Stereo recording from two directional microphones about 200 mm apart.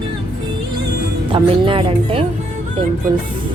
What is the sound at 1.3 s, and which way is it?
Speech, 25° right (ahead or behind).